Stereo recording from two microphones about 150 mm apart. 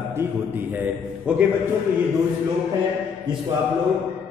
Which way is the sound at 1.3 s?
10° right (ahead or behind).